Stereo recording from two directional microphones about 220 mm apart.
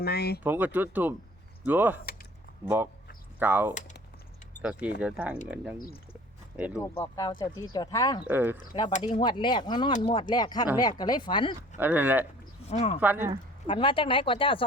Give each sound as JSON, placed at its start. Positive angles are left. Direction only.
{"t": 0.0, "sound": "speech", "side_deg": 45}
{"t": 0.4, "sound": "speech", "side_deg": -10}
{"t": 6.7, "sound": "speech", "side_deg": 15}
{"t": 8.2, "sound": "speech", "side_deg": -10}
{"t": 8.9, "sound": "speech", "side_deg": 30}
{"t": 9.2, "sound": "speech", "side_deg": 20}
{"t": 11.8, "sound": "speech", "side_deg": -10}
{"t": 12.7, "sound": "speech", "side_deg": 30}
{"t": 13.0, "sound": "speech", "side_deg": -10}
{"t": 13.7, "sound": "speech", "side_deg": 25}